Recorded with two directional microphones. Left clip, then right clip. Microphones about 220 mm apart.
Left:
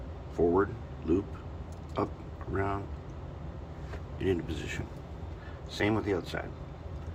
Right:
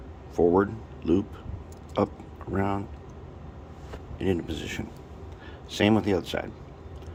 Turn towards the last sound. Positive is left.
turn(degrees=-40)  # may be behind; listen again after turning